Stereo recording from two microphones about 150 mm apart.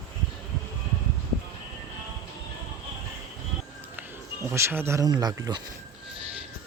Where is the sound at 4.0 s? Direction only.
15° right (ahead or behind).